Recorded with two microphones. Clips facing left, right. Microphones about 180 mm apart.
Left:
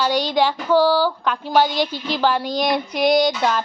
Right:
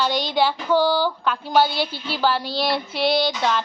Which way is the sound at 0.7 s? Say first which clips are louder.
Left 4 dB; 10° left (ahead or behind).